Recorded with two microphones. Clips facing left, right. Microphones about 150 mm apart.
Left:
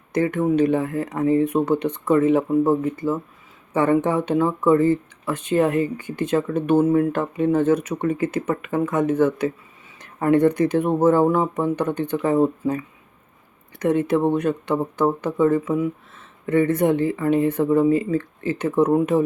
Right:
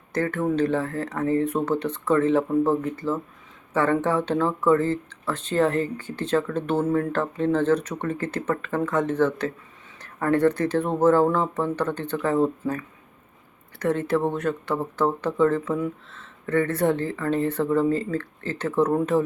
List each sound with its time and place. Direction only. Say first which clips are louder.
0.1 s speech: left 4 dB; 15° left (ahead or behind)